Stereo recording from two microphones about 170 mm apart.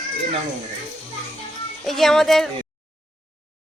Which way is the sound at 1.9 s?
Centre (ahead or behind).